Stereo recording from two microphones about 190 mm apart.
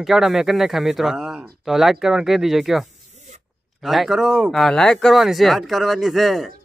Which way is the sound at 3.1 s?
40° right (ahead or behind).